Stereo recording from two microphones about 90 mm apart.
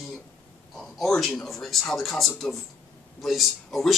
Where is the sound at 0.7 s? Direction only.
Centre (ahead or behind).